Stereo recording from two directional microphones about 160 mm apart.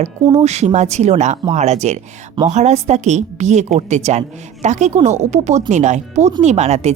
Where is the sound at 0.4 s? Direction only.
45° right (ahead or behind).